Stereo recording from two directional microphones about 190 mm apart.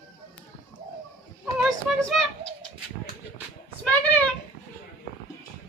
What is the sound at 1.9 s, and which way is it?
Speech, centre (ahead or behind).